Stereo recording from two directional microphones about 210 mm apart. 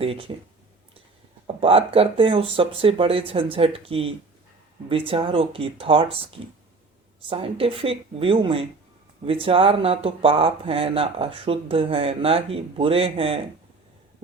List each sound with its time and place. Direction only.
0.0 s speech: 25° right (ahead or behind)
1.6 s speech: 25° right (ahead or behind)